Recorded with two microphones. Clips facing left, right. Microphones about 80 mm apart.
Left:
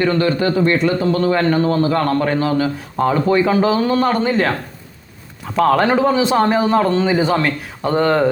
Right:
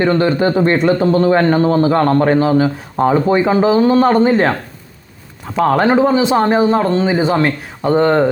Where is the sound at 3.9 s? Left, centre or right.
Right.